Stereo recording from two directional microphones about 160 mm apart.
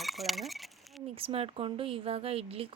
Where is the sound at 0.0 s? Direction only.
Centre (ahead or behind).